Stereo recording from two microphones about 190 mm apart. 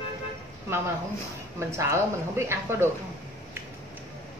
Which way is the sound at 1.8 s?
15° right (ahead or behind).